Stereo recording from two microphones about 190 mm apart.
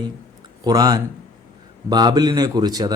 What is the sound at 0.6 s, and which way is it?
Speech, 20° right (ahead or behind).